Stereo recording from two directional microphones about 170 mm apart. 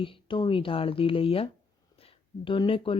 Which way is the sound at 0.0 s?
30° left (ahead or behind).